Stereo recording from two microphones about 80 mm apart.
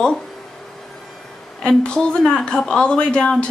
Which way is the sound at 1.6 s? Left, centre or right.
Centre.